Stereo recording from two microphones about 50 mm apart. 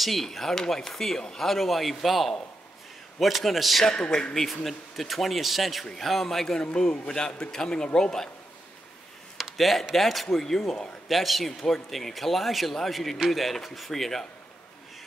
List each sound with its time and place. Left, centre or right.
0.0 s speech: centre
3.8 s a man's voice: centre
4.3 s a man's voice: centre
9.4 s a sound: centre
9.9 s speech: centre